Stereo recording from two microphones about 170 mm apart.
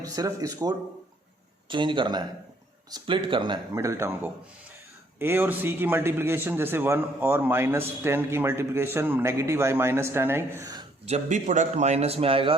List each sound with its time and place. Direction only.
0.0 s a man's voice: 20° right (ahead or behind)
11.0 s a man's voice: 45° right (ahead or behind)